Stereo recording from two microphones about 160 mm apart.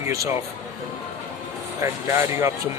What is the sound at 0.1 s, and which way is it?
Speech, 20° right (ahead or behind).